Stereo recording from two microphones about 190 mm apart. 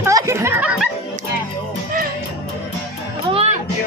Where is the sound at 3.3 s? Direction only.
35° right (ahead or behind).